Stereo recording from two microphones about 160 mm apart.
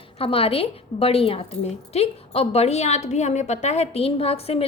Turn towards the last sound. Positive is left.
turn(degrees=40)  # may be behind; listen again after turning